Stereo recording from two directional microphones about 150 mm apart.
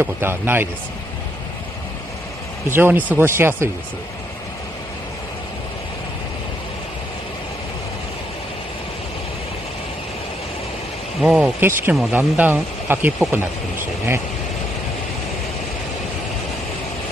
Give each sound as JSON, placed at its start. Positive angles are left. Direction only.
{"t": 0.0, "sound": "speech", "side_deg": -15}
{"t": 2.7, "sound": "speech", "side_deg": -15}
{"t": 11.1, "sound": "speech", "side_deg": -5}